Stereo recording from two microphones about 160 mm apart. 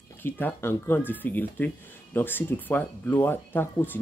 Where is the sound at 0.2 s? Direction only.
15° left (ahead or behind).